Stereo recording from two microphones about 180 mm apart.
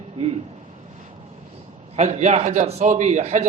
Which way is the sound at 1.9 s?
40° right (ahead or behind).